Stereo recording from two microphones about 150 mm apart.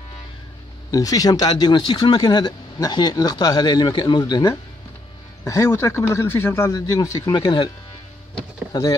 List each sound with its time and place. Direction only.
0.9 s speech: 25° left (ahead or behind)